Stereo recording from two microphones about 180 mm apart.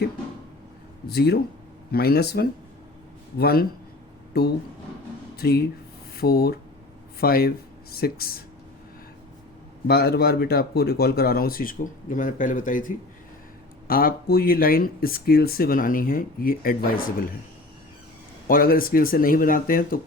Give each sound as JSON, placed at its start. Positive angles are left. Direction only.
{"t": 1.0, "sound": "speech", "side_deg": 65}
{"t": 9.8, "sound": "speech", "side_deg": 60}
{"t": 18.4, "sound": "speech", "side_deg": 55}